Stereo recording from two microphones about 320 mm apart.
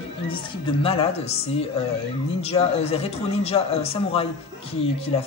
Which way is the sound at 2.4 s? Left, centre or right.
Centre.